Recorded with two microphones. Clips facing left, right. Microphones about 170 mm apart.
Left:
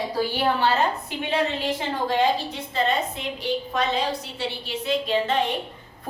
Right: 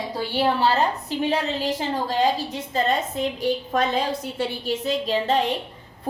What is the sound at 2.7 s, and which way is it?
A woman's voice, 45° right (ahead or behind).